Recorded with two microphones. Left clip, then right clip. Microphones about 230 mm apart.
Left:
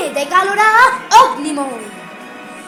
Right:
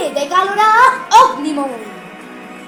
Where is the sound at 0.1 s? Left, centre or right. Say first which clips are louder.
Left 3 dB; left.